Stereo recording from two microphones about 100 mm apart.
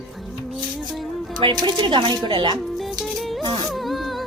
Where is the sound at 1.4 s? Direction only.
50° right (ahead or behind).